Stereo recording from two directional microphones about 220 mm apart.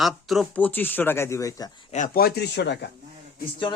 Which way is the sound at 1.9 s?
40° left (ahead or behind).